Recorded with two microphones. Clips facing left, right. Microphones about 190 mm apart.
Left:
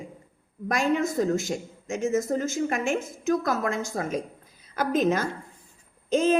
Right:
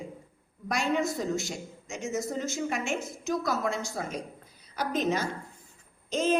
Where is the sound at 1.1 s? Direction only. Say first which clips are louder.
Left 6 dB; 50° left (ahead or behind).